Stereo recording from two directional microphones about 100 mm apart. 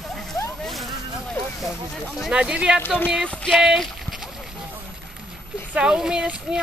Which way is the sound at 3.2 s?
10° left (ahead or behind).